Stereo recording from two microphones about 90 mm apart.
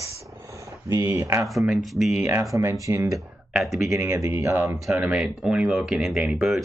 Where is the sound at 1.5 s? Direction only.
Centre (ahead or behind).